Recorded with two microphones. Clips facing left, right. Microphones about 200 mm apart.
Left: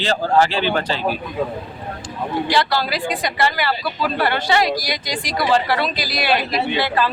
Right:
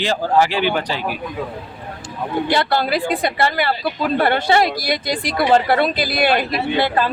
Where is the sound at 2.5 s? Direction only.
55° right (ahead or behind).